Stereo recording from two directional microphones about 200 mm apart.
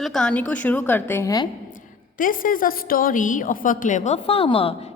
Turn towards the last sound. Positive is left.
turn(degrees=25)  # may be behind; listen again after turning